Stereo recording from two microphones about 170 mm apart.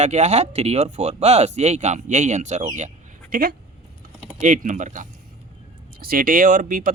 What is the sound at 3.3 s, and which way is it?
Speech, 55° right (ahead or behind).